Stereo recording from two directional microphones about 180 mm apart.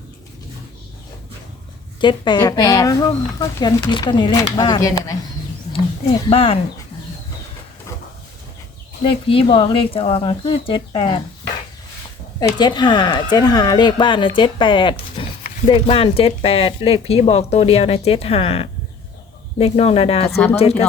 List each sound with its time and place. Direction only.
2.0 s speech: 25° left (ahead or behind)
6.3 s speech: 30° left (ahead or behind)
9.0 s speech: 30° left (ahead or behind)
12.5 s speech: 25° left (ahead or behind)
20.3 s speech: 10° left (ahead or behind)
20.6 s speech: 35° left (ahead or behind)